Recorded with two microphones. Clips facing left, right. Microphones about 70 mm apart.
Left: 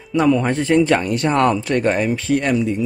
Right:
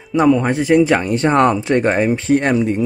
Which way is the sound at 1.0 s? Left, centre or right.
Right.